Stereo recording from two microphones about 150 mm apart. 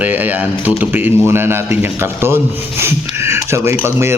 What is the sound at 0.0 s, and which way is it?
A man's voice, 10° right (ahead or behind).